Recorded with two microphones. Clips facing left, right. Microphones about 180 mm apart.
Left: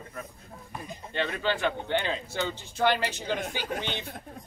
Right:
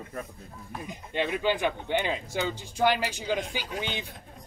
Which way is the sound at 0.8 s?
15° right (ahead or behind).